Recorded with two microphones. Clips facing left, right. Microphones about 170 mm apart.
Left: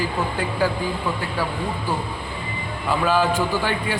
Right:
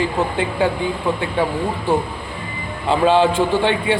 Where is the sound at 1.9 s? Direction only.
25° right (ahead or behind).